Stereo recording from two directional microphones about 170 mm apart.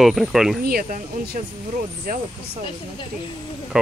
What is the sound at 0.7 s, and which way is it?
Speech, 55° right (ahead or behind).